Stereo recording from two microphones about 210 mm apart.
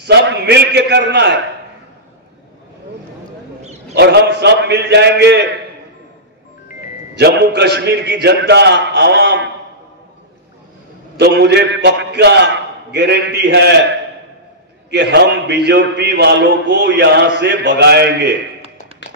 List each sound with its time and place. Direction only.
0.0 s a man's voice: 55° right (ahead or behind)
3.9 s a man's voice: 50° right (ahead or behind)
7.2 s a man's voice: 50° right (ahead or behind)
11.1 s a man's voice: 55° right (ahead or behind)
14.9 s a man's voice: 55° right (ahead or behind)